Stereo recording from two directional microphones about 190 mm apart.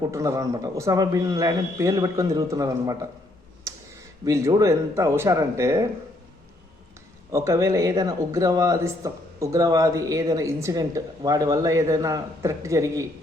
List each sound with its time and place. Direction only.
0.1 s speech: 15° right (ahead or behind)
4.3 s speech: 15° right (ahead or behind)
7.3 s speech: 15° right (ahead or behind)